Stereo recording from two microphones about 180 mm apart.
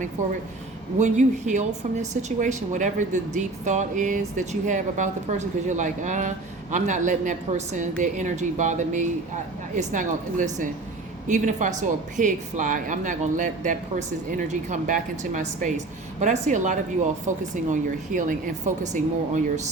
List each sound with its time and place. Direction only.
0.9 s a woman's voice: 40° right (ahead or behind)